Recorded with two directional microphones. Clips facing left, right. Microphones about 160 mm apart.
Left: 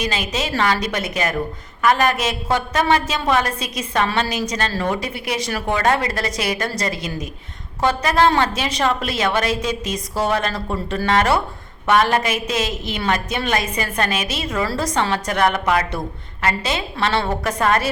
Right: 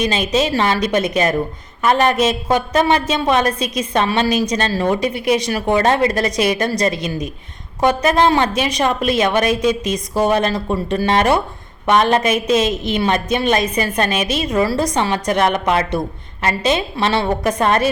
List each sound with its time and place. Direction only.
0.0 s a woman's voice: 20° right (ahead or behind)